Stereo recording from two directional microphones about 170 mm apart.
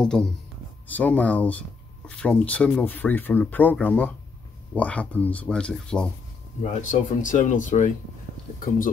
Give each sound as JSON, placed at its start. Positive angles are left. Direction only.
{"t": 0.0, "sound": "speech", "side_deg": 5}
{"t": 6.6, "sound": "speech", "side_deg": 45}